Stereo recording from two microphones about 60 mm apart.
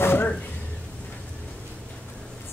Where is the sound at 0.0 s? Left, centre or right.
Left.